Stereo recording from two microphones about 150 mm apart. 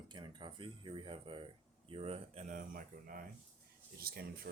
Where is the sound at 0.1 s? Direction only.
30° right (ahead or behind); by 3.2 s 65° right (ahead or behind).